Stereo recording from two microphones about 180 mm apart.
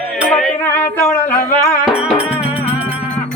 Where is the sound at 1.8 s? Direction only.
5° right (ahead or behind).